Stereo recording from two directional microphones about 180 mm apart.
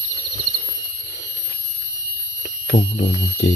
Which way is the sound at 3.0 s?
70° left (ahead or behind).